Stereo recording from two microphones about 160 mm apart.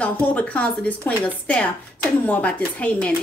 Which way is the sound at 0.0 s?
10° left (ahead or behind).